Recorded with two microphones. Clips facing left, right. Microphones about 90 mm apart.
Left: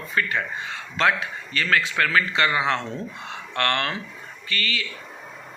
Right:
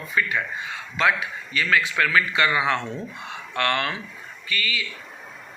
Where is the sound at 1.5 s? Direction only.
45° left (ahead or behind); by 2.8 s 30° left (ahead or behind).